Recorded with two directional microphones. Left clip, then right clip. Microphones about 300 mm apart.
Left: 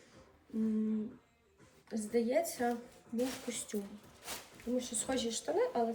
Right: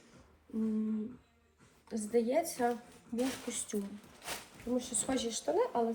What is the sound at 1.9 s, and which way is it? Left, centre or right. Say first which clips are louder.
Speech: right 1 dB; centre.